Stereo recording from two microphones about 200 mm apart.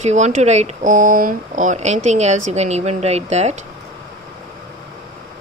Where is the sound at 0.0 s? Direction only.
35° right (ahead or behind).